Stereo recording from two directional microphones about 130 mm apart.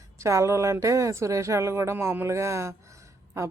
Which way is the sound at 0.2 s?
25° right (ahead or behind).